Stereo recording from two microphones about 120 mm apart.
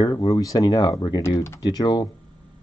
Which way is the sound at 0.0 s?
40° left (ahead or behind).